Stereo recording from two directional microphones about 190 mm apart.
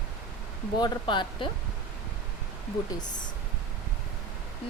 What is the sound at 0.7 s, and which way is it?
Speech, 20° left (ahead or behind).